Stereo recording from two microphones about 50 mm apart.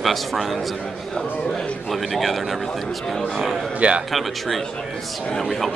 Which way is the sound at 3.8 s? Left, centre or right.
Right.